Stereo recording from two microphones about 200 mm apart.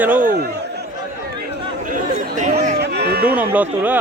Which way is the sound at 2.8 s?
55° right (ahead or behind).